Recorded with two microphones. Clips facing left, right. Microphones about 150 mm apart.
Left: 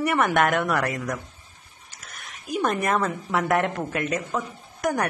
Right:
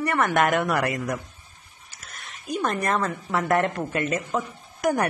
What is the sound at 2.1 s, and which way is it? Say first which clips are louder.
A woman's voice: left 1 dB; 5° left (ahead or behind).